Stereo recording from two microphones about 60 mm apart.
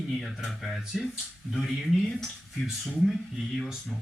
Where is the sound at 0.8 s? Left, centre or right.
Centre.